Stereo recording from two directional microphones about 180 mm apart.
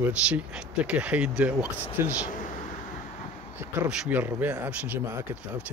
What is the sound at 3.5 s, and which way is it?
Speech, 10° right (ahead or behind).